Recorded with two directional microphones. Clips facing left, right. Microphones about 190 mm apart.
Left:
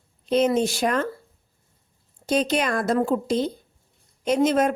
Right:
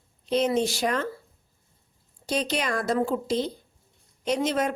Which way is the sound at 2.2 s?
50° left (ahead or behind).